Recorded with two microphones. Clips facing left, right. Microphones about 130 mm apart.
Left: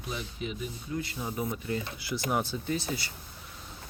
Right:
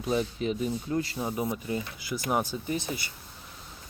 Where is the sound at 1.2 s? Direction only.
25° right (ahead or behind).